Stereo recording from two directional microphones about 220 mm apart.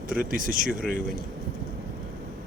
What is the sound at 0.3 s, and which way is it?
Speech, 40° right (ahead or behind).